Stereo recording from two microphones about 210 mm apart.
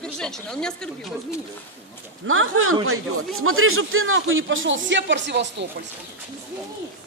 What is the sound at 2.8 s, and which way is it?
A man's voice, 90° right.